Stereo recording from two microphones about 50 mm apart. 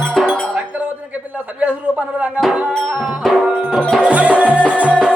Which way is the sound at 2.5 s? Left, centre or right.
Centre.